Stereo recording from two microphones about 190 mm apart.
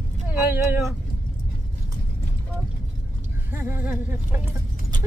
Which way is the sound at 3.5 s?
10° right (ahead or behind).